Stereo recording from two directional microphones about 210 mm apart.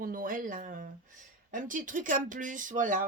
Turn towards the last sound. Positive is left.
turn(degrees=-40)  # may be behind; listen again after turning